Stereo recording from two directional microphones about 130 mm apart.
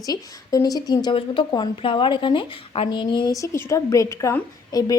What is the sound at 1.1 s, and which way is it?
Speech, 40° left (ahead or behind).